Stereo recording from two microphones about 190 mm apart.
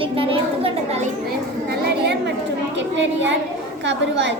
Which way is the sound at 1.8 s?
60° right (ahead or behind).